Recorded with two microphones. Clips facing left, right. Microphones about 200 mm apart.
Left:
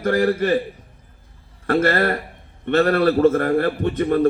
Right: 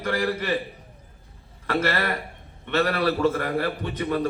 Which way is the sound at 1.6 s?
50° left (ahead or behind).